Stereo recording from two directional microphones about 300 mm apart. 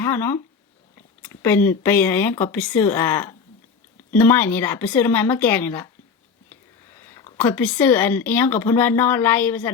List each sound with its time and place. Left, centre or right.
0.0 s speech: centre
6.5 s whispering: centre
7.3 s speech: centre